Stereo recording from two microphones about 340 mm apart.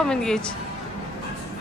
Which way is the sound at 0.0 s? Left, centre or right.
Centre.